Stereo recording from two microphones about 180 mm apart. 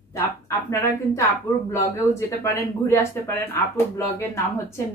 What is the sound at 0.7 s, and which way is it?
Speech, 15° left (ahead or behind).